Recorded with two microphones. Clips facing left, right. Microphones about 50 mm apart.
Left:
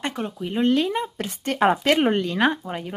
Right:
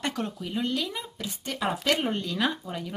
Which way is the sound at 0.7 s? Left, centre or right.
Left.